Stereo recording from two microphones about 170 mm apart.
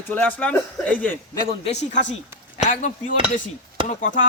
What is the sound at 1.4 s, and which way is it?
Speech, 35° left (ahead or behind).